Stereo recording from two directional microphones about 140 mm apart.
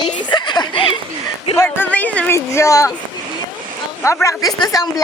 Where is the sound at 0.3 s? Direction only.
35° left (ahead or behind).